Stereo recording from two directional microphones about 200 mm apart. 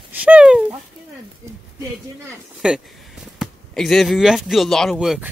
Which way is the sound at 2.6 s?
5° right (ahead or behind).